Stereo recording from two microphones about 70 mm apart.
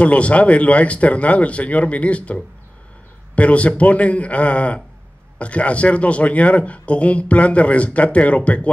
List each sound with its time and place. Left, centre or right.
0.0 s a man's voice: centre